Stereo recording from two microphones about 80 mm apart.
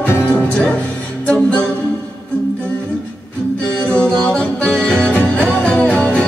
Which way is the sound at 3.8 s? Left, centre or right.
Centre.